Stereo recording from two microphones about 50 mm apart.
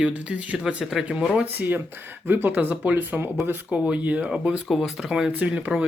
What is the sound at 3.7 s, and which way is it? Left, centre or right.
Speech, right.